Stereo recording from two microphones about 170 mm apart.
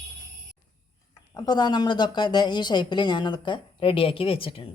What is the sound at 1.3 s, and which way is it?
Speech, 25° left (ahead or behind).